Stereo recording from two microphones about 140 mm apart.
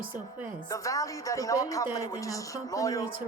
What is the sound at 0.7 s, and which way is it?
Speech, 25° left (ahead or behind).